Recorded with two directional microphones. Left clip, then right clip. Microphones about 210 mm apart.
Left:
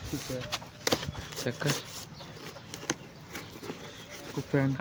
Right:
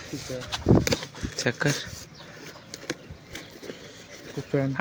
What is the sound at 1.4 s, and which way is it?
Speech, 30° right (ahead or behind).